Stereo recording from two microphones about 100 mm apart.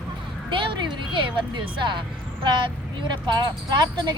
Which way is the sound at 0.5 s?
55° right (ahead or behind).